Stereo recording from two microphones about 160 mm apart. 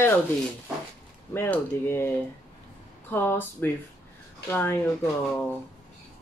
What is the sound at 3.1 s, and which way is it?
Speech, 15° left (ahead or behind).